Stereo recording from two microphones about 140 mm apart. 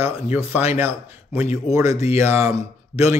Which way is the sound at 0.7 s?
15° right (ahead or behind).